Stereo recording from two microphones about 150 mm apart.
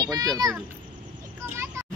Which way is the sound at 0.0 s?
25° right (ahead or behind).